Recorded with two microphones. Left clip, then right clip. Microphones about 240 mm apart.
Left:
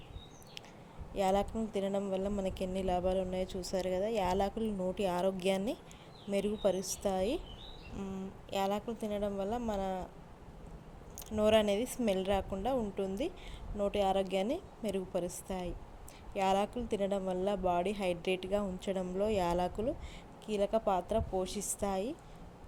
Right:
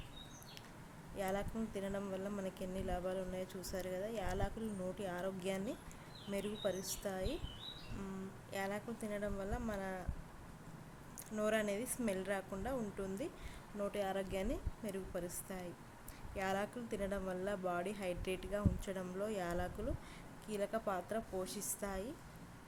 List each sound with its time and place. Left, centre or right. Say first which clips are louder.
1.1 s speech: left 10 dB; centre
8.4 s speech: left 8 dB; centre
11.3 s speech: left 9 dB; centre